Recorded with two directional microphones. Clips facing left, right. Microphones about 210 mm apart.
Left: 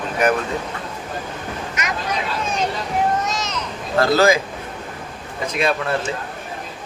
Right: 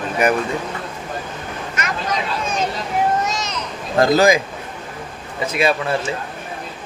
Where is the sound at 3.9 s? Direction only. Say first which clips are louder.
Right 2 dB; 15° right (ahead or behind).